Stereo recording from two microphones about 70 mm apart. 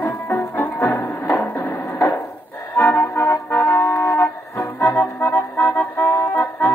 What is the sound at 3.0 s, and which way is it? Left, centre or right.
Music, left.